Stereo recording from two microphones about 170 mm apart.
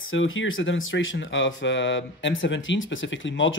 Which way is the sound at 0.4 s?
90° left.